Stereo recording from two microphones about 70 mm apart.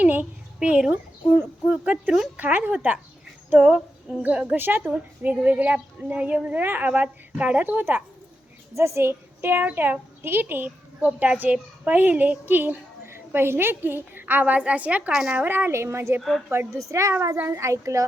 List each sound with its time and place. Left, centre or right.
0.0 s a sound: right
1.8 s a child's voice: centre
8.7 s a woman's voice: right
11.0 s a child's voice: centre
15.1 s speech: centre
15.4 s a child's voice: right